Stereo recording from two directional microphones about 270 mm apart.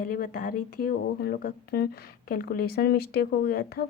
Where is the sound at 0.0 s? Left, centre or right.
Left.